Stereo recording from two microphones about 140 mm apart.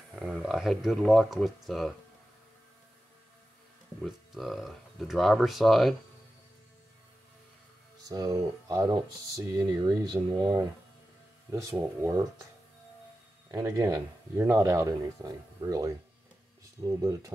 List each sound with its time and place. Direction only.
0.1 s speech: 5° right (ahead or behind)
4.0 s speech: centre (ahead or behind)
8.1 s speech: 25° right (ahead or behind)
13.5 s speech: 20° right (ahead or behind)